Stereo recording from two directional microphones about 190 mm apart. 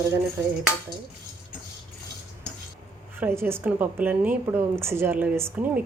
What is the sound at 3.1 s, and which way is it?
A woman's voice, 10° right (ahead or behind).